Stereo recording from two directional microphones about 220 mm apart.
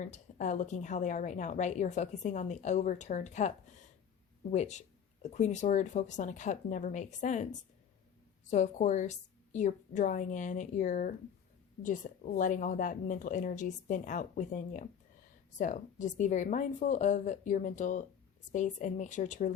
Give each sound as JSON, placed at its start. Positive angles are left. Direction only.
{"t": 0.0, "sound": "a woman's voice", "side_deg": 35}
{"t": 4.5, "sound": "a woman's voice", "side_deg": 30}